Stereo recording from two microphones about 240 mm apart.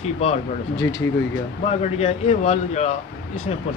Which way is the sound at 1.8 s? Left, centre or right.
Left.